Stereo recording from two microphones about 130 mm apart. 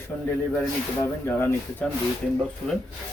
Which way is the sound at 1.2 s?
15° left (ahead or behind).